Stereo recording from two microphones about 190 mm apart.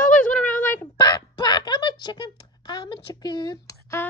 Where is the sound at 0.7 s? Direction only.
20° left (ahead or behind).